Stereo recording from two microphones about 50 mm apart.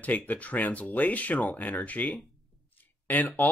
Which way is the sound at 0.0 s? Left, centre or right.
Left.